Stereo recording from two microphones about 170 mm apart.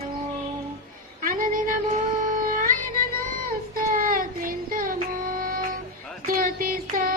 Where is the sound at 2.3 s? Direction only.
50° right (ahead or behind).